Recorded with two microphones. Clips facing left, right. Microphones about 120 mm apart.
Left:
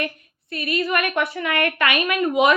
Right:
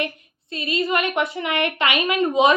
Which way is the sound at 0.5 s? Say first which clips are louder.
Even; 20° right (ahead or behind).